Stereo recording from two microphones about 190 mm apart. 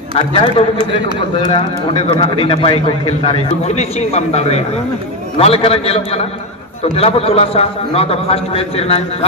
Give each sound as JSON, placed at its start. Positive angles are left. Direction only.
{"t": 0.2, "sound": "a man's voice", "side_deg": 30}